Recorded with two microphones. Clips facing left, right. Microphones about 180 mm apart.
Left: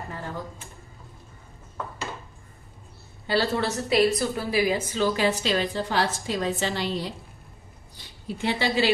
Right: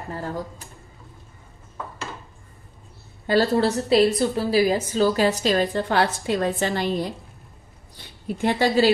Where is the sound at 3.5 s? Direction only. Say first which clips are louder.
Right 5 dB; 30° right (ahead or behind); by 7.1 s 50° right (ahead or behind).